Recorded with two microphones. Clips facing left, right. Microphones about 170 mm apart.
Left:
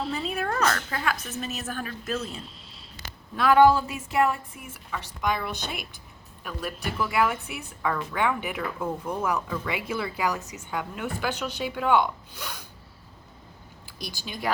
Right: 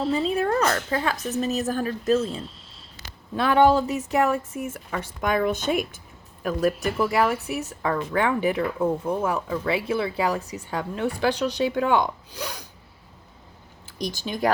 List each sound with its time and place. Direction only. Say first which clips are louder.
0.0 s a woman's voice: right 6 dB; 25° right (ahead or behind)
3.8 s a woman's voice: right 3 dB; 40° right (ahead or behind)